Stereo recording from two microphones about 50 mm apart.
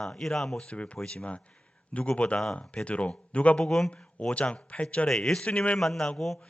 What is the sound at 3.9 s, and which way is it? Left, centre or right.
Speech, left.